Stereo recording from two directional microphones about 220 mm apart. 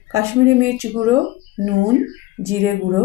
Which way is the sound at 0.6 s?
10° right (ahead or behind).